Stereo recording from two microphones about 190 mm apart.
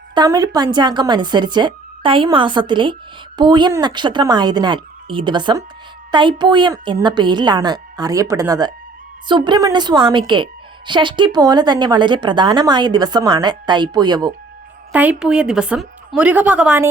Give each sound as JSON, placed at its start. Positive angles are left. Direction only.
{"t": 0.1, "sound": "a woman's voice", "side_deg": -20}
{"t": 14.9, "sound": "a woman's voice", "side_deg": -5}